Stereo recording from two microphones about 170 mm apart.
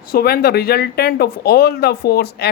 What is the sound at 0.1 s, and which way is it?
Speech, 65° left (ahead or behind).